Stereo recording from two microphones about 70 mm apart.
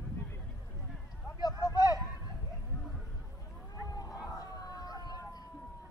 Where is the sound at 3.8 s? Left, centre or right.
Left.